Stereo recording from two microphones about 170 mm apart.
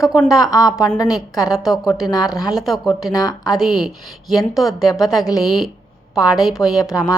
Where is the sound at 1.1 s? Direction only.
Centre (ahead or behind).